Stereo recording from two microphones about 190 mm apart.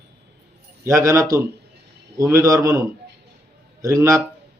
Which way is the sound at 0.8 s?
15° right (ahead or behind).